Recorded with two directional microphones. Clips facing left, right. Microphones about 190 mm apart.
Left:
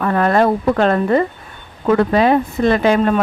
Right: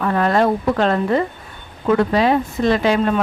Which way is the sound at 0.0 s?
55° left (ahead or behind).